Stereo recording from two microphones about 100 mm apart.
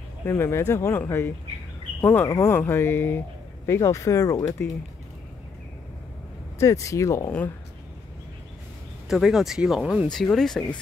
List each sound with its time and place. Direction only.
0.2 s speech: 25° left (ahead or behind)
6.6 s speech: 30° left (ahead or behind)
9.1 s speech: 5° right (ahead or behind)